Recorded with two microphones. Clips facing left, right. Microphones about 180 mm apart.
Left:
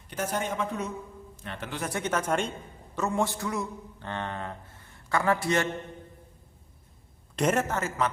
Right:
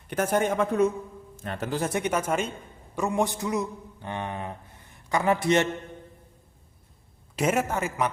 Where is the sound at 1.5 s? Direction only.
40° right (ahead or behind).